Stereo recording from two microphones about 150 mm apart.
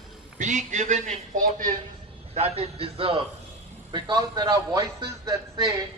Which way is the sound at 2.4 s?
40° right (ahead or behind).